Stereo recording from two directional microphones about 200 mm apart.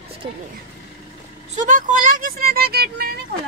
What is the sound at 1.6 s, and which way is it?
Speech, 40° right (ahead or behind).